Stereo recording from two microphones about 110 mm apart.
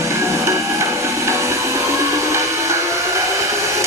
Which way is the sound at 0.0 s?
25° right (ahead or behind).